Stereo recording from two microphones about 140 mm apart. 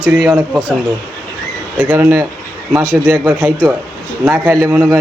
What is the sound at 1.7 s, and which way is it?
A man's voice, 15° right (ahead or behind).